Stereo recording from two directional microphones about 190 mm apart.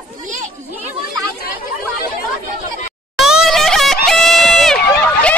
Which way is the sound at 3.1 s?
Centre (ahead or behind).